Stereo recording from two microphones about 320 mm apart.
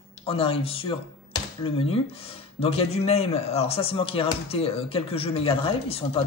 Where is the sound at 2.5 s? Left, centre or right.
Centre.